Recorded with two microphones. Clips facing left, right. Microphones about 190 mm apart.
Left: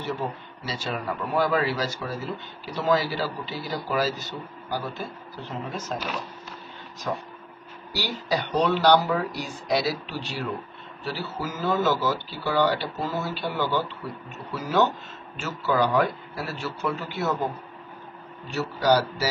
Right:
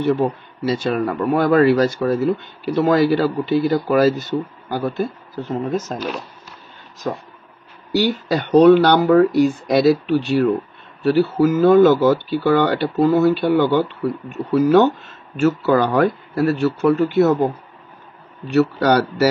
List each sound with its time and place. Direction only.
0.0 s speech: 55° right (ahead or behind)
7.9 s speech: 50° right (ahead or behind)
18.5 s speech: 65° right (ahead or behind)